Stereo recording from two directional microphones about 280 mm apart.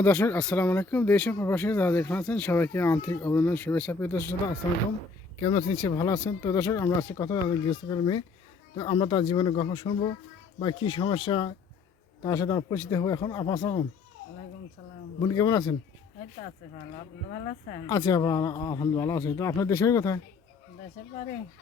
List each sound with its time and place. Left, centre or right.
0.0 s speech: centre
5.4 s speech: centre
15.2 s speech: centre
17.8 s speech: centre